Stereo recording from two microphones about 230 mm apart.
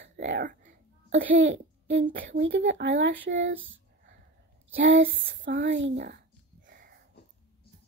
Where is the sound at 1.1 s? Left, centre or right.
Right.